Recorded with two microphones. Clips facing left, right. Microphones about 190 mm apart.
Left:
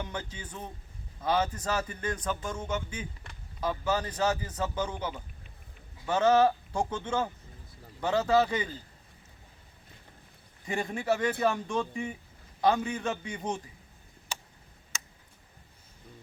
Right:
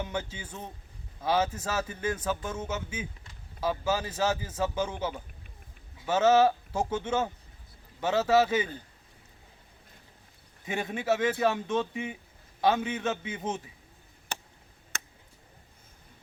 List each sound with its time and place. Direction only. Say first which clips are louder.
0.0 s speech: right 3 dB; 10° right (ahead or behind)
8.0 s speech: right 1 dB; 5° right (ahead or behind)
10.7 s speech: right 1 dB; centre (ahead or behind)
14.3 s a sound: right 1 dB; 55° right (ahead or behind)
14.9 s tick: right 3 dB; 60° right (ahead or behind)